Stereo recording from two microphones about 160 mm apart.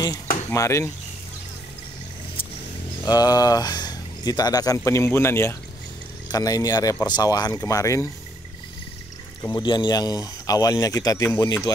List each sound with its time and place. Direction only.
0.5 s speech: 15° left (ahead or behind)
3.1 s speech: 25° left (ahead or behind)
9.5 s speech: 30° left (ahead or behind)